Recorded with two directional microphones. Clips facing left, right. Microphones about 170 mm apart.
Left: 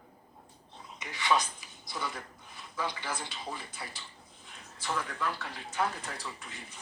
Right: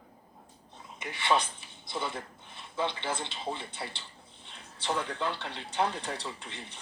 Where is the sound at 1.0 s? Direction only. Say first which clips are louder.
Right 3 dB; 60° right (ahead or behind).